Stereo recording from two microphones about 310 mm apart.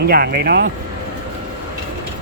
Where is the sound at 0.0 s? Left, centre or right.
Right.